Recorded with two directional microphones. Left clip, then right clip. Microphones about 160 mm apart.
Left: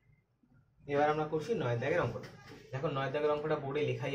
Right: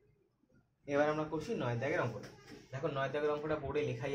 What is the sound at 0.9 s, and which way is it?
Speech, 55° right (ahead or behind).